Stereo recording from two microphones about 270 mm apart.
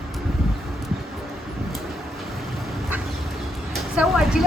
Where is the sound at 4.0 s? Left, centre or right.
Centre.